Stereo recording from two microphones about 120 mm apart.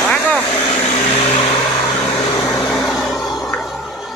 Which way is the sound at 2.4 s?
25° left (ahead or behind).